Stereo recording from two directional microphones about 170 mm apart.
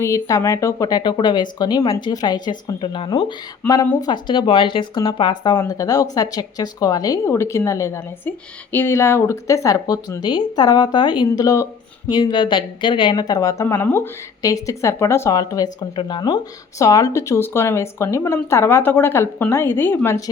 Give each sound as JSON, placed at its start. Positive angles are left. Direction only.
{"t": 0.0, "sound": "speech", "side_deg": 20}
{"t": 3.6, "sound": "speech", "side_deg": 10}
{"t": 4.0, "sound": "speech", "side_deg": 25}